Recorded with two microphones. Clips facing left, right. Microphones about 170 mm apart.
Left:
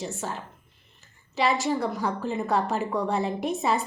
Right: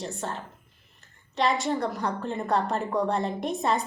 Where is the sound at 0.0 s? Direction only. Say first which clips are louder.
Even; 5° left (ahead or behind).